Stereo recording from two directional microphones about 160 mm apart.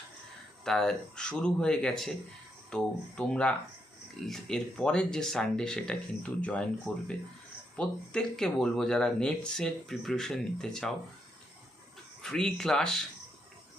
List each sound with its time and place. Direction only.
0.6 s speech: 5° left (ahead or behind)
12.2 s speech: 5° left (ahead or behind)